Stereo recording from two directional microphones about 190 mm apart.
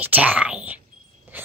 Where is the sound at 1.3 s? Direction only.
10° right (ahead or behind).